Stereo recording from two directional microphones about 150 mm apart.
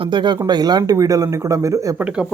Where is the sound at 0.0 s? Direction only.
30° right (ahead or behind).